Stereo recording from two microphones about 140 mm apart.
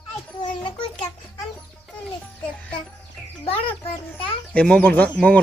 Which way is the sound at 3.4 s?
40° left (ahead or behind).